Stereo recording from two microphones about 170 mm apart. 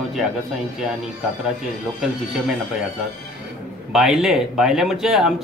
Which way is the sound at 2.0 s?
Centre (ahead or behind).